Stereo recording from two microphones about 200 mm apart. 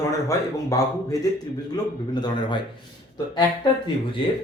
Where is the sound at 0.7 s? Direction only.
15° left (ahead or behind).